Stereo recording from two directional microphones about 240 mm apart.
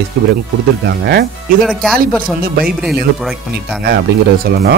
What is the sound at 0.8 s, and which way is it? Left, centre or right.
Speech, right.